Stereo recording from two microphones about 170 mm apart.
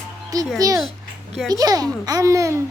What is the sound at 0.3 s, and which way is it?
Speech, 20° right (ahead or behind).